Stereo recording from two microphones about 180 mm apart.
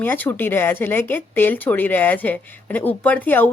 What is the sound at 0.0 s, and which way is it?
A woman's voice, 10° left (ahead or behind).